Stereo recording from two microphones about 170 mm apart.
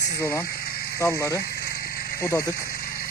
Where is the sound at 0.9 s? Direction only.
15° left (ahead or behind).